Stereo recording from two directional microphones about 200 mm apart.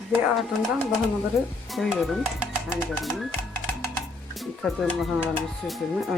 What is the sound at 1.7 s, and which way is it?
Speech, centre (ahead or behind).